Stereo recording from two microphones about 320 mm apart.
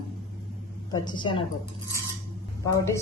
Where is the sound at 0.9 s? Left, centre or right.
Centre.